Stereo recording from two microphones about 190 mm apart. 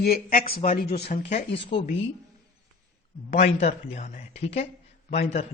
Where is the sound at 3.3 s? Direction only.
35° left (ahead or behind).